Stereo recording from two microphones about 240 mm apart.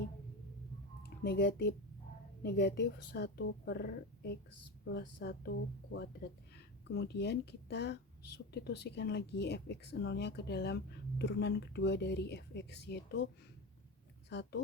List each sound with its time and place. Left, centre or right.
1.0 s speech: left
14.3 s speech: left